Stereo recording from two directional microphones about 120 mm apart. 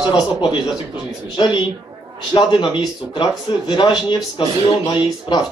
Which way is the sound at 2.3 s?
40° left (ahead or behind).